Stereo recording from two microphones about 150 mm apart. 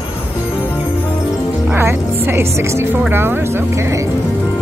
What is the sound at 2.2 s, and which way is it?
Speech, 15° right (ahead or behind).